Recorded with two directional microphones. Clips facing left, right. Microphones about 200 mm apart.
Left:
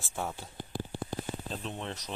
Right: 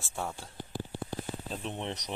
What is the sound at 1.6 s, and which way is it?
Speech, 20° right (ahead or behind).